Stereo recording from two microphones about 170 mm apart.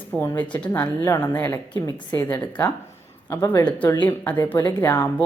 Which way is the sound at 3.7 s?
10° left (ahead or behind).